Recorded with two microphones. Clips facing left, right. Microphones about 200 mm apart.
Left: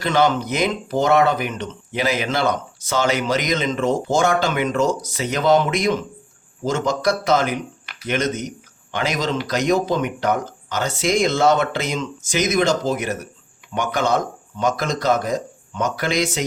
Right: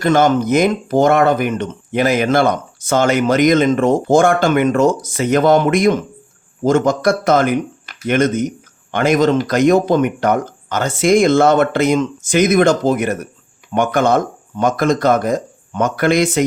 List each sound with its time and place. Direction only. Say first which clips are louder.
0.0 s speech: right 5 dB; 50° right (ahead or behind)